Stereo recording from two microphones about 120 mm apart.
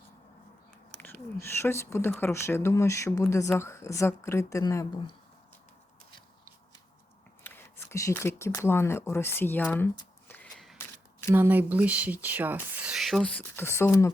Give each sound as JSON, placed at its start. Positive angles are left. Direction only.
{"t": 1.0, "sound": "speech", "side_deg": 20}
{"t": 7.4, "sound": "speech", "side_deg": 20}
{"t": 10.2, "sound": "a sound", "side_deg": 15}
{"t": 11.3, "sound": "speech", "side_deg": -15}